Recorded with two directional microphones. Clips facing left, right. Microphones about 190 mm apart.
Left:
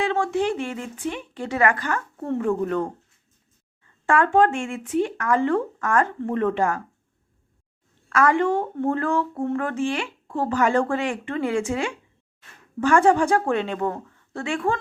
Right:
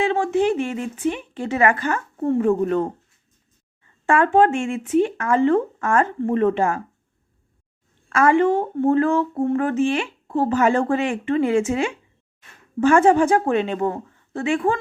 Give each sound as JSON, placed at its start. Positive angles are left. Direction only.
{"t": 0.0, "sound": "a woman's voice", "side_deg": -20}
{"t": 4.0, "sound": "a woman's voice", "side_deg": -20}
{"t": 8.1, "sound": "a woman's voice", "side_deg": -25}